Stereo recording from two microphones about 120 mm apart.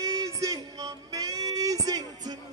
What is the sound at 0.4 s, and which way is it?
Music, 30° right (ahead or behind).